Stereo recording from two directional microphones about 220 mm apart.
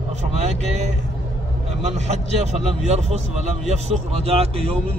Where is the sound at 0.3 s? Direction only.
30° right (ahead or behind).